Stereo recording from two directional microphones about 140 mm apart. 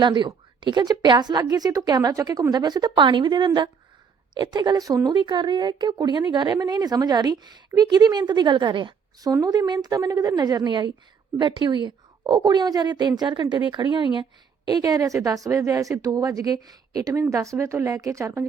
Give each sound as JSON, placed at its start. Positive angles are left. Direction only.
{"t": 0.0, "sound": "a woman's voice", "side_deg": -35}